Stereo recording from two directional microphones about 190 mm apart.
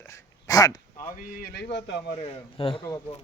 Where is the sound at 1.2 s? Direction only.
50° left (ahead or behind).